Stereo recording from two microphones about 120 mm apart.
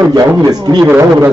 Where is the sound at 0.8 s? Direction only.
15° right (ahead or behind).